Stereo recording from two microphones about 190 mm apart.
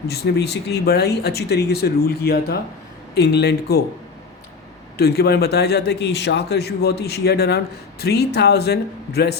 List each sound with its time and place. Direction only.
0.1 s a man's voice: 60° left (ahead or behind)
4.9 s a man's voice: 55° left (ahead or behind)